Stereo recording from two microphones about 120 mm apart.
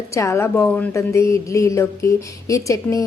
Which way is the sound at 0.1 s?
25° left (ahead or behind).